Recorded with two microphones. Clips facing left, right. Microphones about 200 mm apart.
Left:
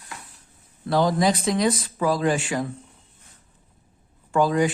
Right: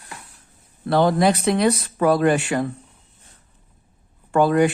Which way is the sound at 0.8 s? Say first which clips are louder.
Right 3 dB; 60° right (ahead or behind).